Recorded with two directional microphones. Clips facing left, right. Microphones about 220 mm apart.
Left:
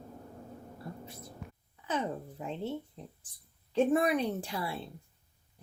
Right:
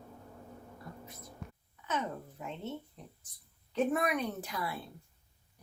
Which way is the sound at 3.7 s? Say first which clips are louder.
Left 4 dB; 30° left (ahead or behind).